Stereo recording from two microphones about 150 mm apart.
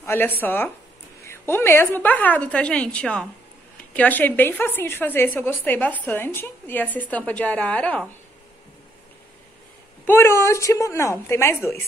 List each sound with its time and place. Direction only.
0.0 s a woman's voice: 15° left (ahead or behind)
10.0 s a woman's voice: 15° left (ahead or behind)